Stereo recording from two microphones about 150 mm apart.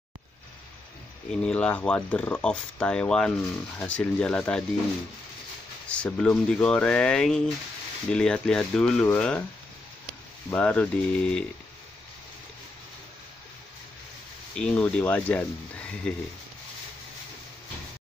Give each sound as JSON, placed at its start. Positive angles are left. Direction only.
{"t": 1.3, "sound": "speech", "side_deg": 5}
{"t": 5.9, "sound": "speech", "side_deg": 5}
{"t": 10.5, "sound": "speech", "side_deg": 10}
{"t": 14.5, "sound": "speech", "side_deg": 5}